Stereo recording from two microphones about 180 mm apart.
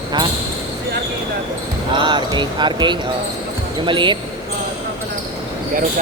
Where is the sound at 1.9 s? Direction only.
25° right (ahead or behind).